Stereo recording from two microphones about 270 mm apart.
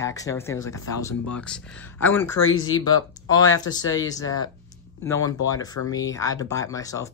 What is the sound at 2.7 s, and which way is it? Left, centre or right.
Speech, centre.